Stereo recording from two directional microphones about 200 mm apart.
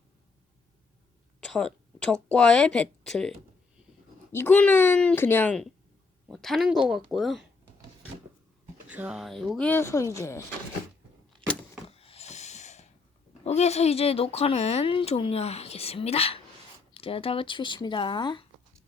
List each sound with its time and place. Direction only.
1.5 s speech: 5° left (ahead or behind)
8.9 s speech: 5° right (ahead or behind); by 10.4 s 15° left (ahead or behind)
11.9 s a sound: 30° left (ahead or behind)
13.4 s speech: 35° left (ahead or behind)